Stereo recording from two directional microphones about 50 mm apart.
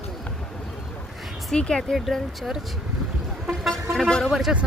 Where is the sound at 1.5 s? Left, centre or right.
Centre.